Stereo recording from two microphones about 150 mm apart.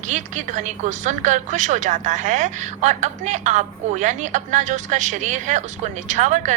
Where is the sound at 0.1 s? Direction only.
55° right (ahead or behind).